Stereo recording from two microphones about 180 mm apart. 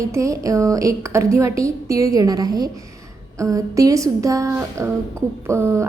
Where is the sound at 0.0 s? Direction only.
15° right (ahead or behind).